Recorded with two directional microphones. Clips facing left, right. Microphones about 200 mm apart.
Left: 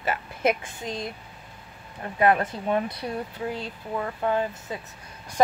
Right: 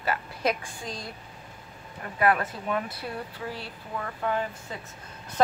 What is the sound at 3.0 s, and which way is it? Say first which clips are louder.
A woman's voice: left 4 dB; 20° left (ahead or behind).